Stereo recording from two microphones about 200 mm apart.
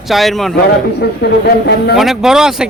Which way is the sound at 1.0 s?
55° left (ahead or behind).